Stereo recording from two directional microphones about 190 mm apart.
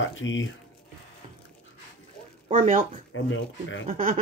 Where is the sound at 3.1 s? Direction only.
90° left.